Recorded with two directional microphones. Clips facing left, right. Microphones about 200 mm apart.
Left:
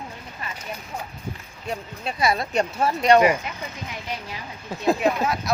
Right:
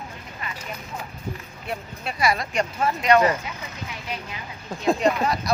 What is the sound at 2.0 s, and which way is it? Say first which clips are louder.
Speech: left 1 dB; 25° left (ahead or behind).